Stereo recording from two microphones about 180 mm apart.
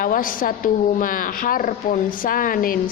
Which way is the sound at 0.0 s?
50° left (ahead or behind).